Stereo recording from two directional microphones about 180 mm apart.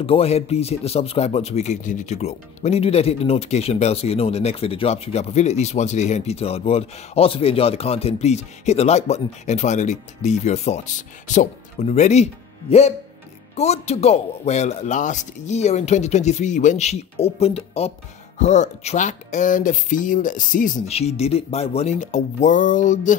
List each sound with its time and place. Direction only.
0.0 s speech: 30° left (ahead or behind)